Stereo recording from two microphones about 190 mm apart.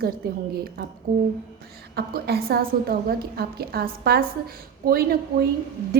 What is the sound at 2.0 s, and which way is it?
A woman's voice, 55° right (ahead or behind).